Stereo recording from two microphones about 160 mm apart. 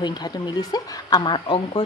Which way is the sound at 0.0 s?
25° left (ahead or behind).